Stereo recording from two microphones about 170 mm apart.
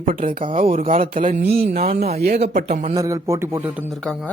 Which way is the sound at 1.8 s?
40° right (ahead or behind).